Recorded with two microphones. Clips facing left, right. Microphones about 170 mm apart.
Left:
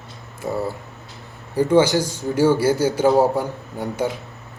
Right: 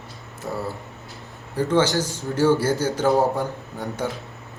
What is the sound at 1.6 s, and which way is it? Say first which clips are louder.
Speech: left 4 dB; 10° left (ahead or behind).